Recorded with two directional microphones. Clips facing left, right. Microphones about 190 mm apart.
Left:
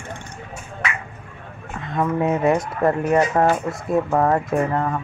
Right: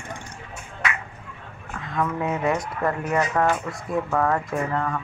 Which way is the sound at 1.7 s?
25° left (ahead or behind).